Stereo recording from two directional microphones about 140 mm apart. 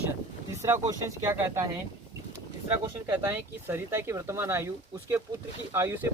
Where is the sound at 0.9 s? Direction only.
20° right (ahead or behind).